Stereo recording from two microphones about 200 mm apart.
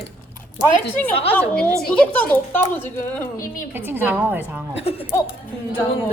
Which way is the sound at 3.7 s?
10° right (ahead or behind).